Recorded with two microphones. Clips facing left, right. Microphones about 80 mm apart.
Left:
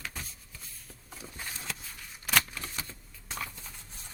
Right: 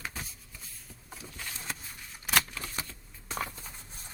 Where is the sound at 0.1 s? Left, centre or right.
Centre.